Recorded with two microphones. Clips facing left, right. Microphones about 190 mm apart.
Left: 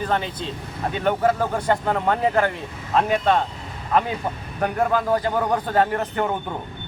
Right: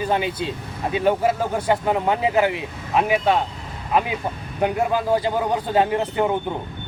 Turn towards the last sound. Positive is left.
turn(degrees=-15)  # may be behind; listen again after turning